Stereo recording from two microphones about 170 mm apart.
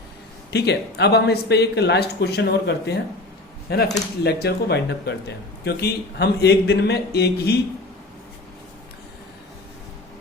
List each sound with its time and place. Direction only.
0.5 s a man's voice: 75° left (ahead or behind)
5.6 s a man's voice: 70° left (ahead or behind)